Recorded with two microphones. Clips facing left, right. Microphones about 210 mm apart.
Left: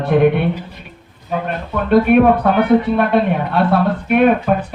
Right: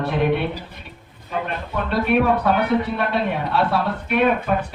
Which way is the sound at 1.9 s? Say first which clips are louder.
Left 8 dB; 55° left (ahead or behind).